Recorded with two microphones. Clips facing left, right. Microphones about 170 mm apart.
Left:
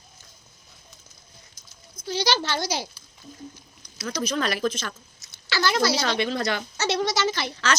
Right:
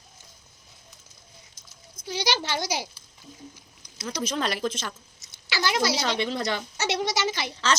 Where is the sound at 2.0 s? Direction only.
15° right (ahead or behind).